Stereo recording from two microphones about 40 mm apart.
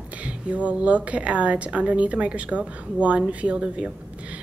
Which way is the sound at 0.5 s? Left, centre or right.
Right.